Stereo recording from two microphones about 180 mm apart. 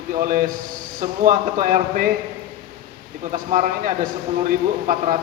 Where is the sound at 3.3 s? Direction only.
45° right (ahead or behind).